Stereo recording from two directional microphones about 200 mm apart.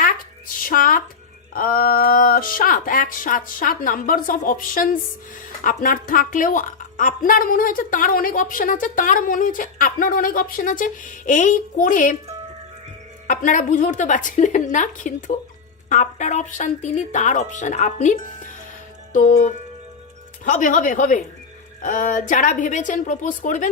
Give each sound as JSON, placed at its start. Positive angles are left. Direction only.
{"t": 0.6, "sound": "speech", "side_deg": 45}
{"t": 13.2, "sound": "speech", "side_deg": 40}
{"t": 20.4, "sound": "speech", "side_deg": 40}